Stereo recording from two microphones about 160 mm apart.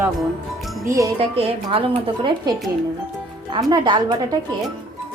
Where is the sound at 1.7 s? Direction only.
35° right (ahead or behind).